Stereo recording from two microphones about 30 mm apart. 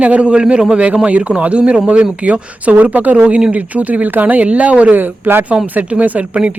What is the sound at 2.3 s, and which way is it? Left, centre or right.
Speech, right.